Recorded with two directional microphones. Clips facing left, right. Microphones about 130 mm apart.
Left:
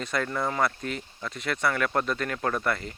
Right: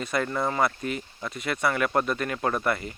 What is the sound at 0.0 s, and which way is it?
Speech, 10° right (ahead or behind).